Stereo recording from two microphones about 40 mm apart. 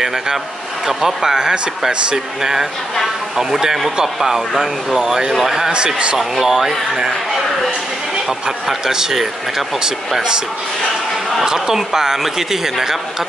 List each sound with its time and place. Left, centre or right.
0.8 s speech: centre
8.3 s speech: centre
9.8 s speech: centre
11.4 s speech: centre